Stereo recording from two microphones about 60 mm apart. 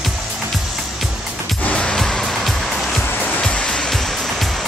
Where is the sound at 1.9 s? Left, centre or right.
Centre.